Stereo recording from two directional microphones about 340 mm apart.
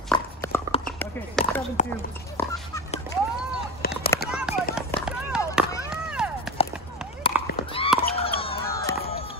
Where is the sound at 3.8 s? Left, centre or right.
Left.